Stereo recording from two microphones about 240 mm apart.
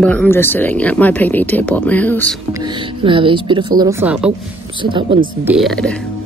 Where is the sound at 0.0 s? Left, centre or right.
Centre.